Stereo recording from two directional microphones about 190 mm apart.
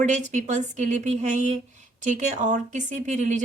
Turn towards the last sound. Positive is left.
turn(degrees=-40)  # may be behind; listen again after turning